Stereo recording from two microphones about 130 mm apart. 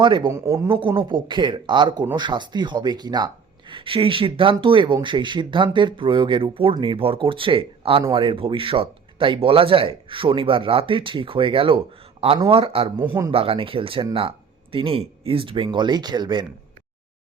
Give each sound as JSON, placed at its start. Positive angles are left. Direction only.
{"t": 0.0, "sound": "speech", "side_deg": -35}
{"t": 0.3, "sound": "speech", "side_deg": -25}
{"t": 0.7, "sound": "speech", "side_deg": -40}
{"t": 13.0, "sound": "speech", "side_deg": -20}
{"t": 13.3, "sound": "speech", "side_deg": -45}